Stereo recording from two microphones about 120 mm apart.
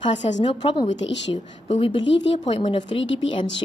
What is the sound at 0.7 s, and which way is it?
A woman's voice, 40° left (ahead or behind).